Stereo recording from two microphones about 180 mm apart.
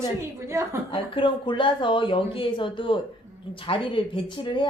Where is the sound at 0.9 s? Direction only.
30° left (ahead or behind).